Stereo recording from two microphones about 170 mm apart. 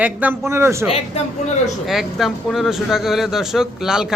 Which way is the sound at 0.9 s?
35° left (ahead or behind).